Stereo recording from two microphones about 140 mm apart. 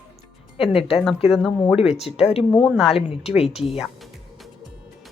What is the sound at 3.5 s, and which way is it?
Speech, 45° left (ahead or behind).